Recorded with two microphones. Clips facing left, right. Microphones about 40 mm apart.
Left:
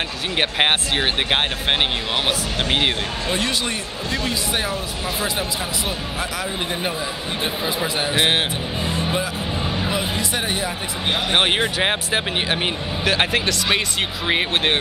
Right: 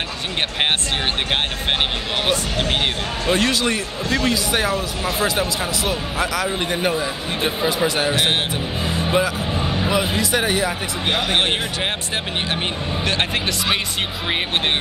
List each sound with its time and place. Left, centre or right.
2.2 s speech: centre
3.3 s speech: right
8.1 s speech: centre
8.8 s music: centre
9.6 s a sound: centre
11.2 s speech: centre